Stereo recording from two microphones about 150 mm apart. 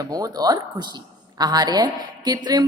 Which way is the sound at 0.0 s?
25° right (ahead or behind).